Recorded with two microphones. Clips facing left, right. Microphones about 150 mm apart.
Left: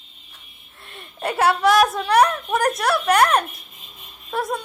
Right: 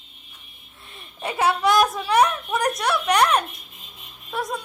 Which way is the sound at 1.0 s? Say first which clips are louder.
Left 3 dB; centre (ahead or behind).